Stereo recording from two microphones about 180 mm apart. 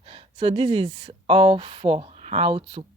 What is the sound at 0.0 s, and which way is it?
A woman's voice, 30° right (ahead or behind).